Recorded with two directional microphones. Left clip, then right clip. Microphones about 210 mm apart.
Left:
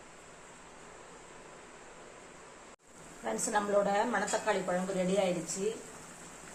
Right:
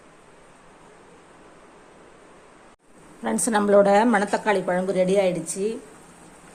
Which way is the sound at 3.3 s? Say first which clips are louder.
Right 11 dB; 50° right (ahead or behind).